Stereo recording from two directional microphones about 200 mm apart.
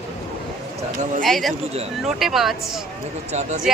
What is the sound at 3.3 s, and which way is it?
Speech, 35° right (ahead or behind).